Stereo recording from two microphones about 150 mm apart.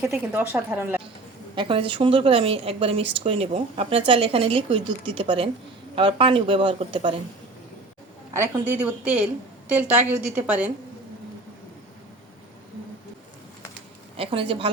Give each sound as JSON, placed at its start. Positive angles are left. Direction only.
{"t": 0.1, "sound": "a woman's voice", "side_deg": -10}
{"t": 1.5, "sound": "a woman's voice", "side_deg": -35}
{"t": 8.6, "sound": "a woman's voice", "side_deg": -10}
{"t": 14.2, "sound": "a woman's voice", "side_deg": -40}